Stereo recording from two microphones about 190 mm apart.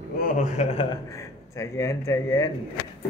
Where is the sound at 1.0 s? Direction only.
15° left (ahead or behind).